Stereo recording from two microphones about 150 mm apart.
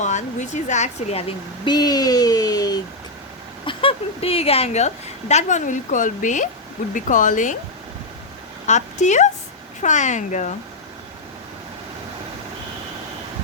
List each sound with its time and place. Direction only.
0.0 s speech: 50° left (ahead or behind)
1.6 s speech: 25° left (ahead or behind)
3.7 s a woman's voice: 35° left (ahead or behind); by 7.5 s 60° left (ahead or behind)
8.6 s speech: 50° left (ahead or behind)